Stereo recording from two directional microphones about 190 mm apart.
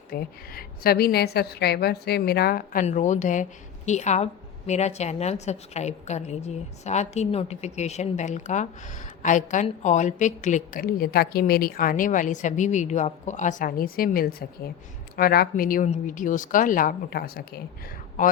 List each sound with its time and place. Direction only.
0.1 s a woman's voice: 50° left (ahead or behind)
2.8 s a woman's voice: 40° left (ahead or behind)